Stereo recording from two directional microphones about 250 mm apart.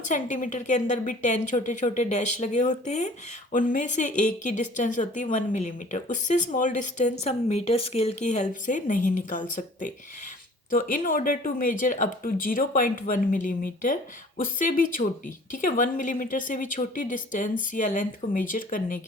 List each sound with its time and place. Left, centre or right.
0.0 s speech: left